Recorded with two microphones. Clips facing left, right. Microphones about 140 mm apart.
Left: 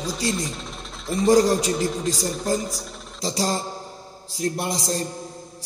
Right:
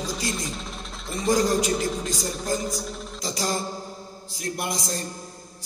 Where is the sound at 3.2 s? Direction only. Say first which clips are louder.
Left 4 dB; 30° left (ahead or behind).